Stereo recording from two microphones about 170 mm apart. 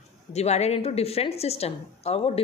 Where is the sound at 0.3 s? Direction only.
40° left (ahead or behind).